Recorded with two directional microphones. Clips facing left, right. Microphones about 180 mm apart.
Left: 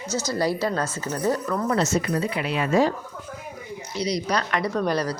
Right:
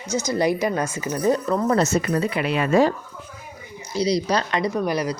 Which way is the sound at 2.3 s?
60° right (ahead or behind).